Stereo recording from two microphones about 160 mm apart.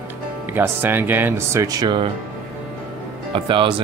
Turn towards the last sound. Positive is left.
turn(degrees=-30)  # may be behind; listen again after turning